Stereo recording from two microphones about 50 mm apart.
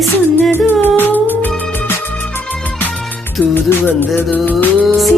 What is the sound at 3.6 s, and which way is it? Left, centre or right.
Music, left.